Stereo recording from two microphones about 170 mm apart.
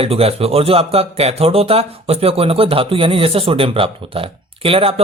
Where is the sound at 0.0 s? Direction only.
35° right (ahead or behind).